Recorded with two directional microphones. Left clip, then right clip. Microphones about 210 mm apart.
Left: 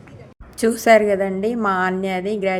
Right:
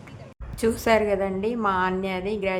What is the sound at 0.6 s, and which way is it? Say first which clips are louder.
A woman's voice: left 7 dB; 20° left (ahead or behind).